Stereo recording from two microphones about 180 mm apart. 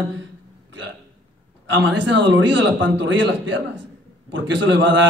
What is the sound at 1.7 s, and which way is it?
A man's voice, 80° right.